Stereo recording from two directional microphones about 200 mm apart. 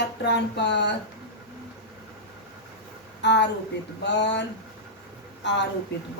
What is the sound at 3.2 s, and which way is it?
A woman's voice, 60° left (ahead or behind).